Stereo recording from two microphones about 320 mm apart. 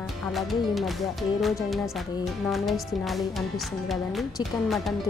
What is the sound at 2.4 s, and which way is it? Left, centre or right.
Speech, centre.